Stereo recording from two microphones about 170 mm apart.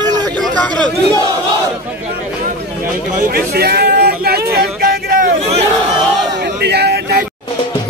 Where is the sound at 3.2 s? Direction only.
65° right (ahead or behind).